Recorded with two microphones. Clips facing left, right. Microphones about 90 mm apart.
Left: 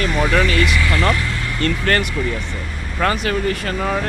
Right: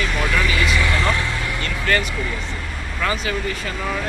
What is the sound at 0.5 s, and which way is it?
Speech, 15° right (ahead or behind).